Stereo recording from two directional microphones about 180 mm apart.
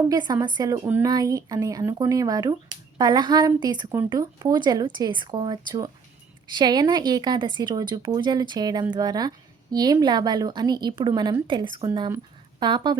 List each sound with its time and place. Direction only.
0.1 s speech: 20° right (ahead or behind)